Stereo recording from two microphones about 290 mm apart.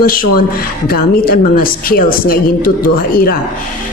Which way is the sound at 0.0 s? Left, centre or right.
Left.